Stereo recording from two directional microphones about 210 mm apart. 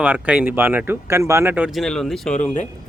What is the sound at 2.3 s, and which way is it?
Speech, 35° left (ahead or behind).